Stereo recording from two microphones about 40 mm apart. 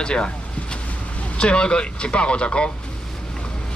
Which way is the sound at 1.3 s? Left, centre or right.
Left.